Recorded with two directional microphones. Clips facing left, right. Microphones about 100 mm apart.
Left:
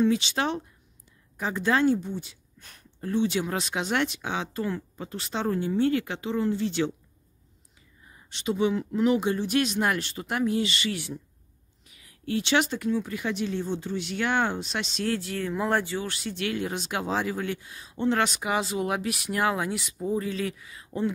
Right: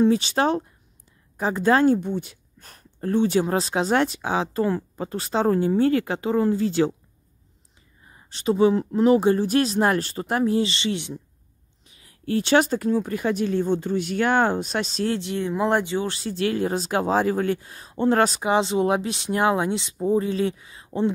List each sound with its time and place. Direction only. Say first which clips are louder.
0.0 s speech: right 5 dB; 40° right (ahead or behind)
8.1 s speech: right 6 dB; 35° right (ahead or behind)
15.0 s speech: right 4 dB; 25° right (ahead or behind)